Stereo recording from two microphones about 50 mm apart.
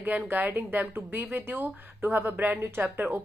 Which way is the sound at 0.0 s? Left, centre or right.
Right.